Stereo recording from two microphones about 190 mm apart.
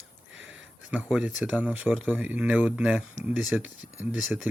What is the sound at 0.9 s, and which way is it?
Speech, 5° right (ahead or behind).